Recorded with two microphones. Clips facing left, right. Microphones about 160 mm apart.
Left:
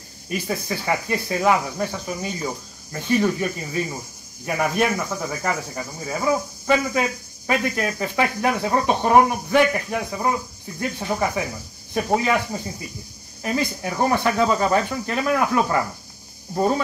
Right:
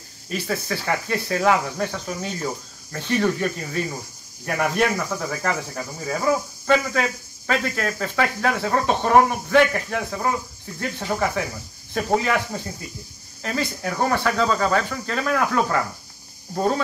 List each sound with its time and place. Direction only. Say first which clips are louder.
0.3 s speech: even; 10° left (ahead or behind)
11.9 s speech: left 1 dB; 5° left (ahead or behind)
13.4 s speech: left 2 dB; 15° left (ahead or behind)